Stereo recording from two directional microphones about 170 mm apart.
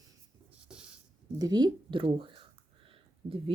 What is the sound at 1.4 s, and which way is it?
Speech, 25° right (ahead or behind).